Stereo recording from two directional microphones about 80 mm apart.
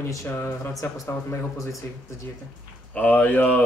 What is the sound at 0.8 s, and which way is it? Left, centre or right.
Speech, left.